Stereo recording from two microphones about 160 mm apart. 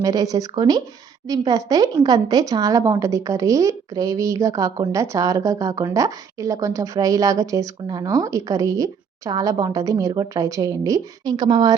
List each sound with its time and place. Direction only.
0.0 s a woman's voice: 20° right (ahead or behind)